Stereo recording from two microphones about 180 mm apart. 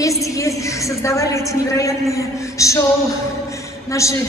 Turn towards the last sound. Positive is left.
turn(degrees=15)  # may be behind; listen again after turning